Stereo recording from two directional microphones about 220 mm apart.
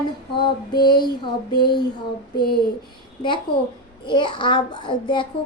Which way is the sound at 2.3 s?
45° left (ahead or behind).